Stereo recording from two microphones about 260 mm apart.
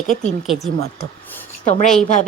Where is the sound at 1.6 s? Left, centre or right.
Left.